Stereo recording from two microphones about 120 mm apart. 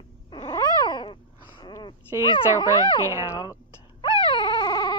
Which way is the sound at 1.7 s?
40° left (ahead or behind).